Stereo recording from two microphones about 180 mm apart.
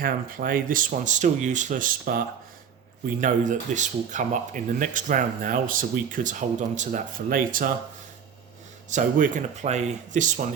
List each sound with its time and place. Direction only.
0.0 s speech: 50° right (ahead or behind)
8.9 s speech: 45° right (ahead or behind)